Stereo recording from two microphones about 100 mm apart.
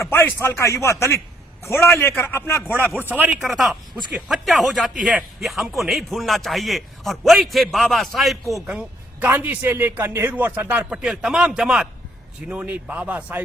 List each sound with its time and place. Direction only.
0.0 s speech: 25° left (ahead or behind)
3.4 s speech: centre (ahead or behind)
8.6 s a man's voice: 10° right (ahead or behind)